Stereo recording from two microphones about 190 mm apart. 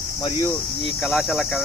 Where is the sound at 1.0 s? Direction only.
Centre (ahead or behind).